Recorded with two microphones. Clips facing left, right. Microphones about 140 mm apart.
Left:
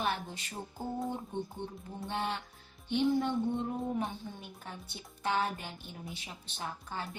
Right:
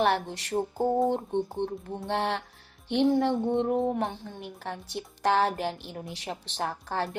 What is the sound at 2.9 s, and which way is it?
Speech, 75° right (ahead or behind).